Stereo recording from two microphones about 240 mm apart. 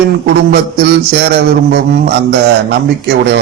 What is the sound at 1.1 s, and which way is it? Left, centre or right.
Speech, right.